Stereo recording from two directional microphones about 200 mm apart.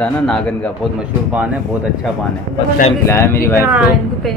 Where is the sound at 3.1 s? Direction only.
15° left (ahead or behind).